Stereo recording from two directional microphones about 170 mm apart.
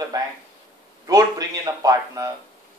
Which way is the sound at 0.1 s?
20° right (ahead or behind).